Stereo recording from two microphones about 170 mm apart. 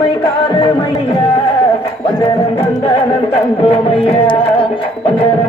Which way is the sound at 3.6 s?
35° left (ahead or behind).